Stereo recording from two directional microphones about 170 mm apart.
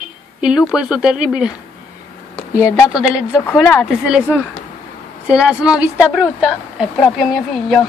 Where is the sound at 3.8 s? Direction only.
5° right (ahead or behind).